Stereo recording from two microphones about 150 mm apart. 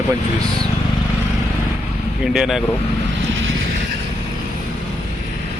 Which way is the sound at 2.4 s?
Centre (ahead or behind).